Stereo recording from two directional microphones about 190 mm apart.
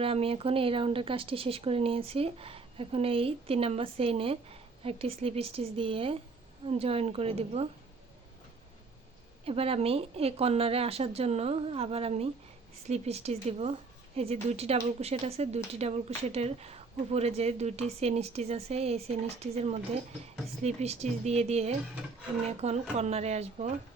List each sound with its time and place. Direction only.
0.0 s a woman's voice: 30° right (ahead or behind)
9.4 s a woman's voice: 30° right (ahead or behind)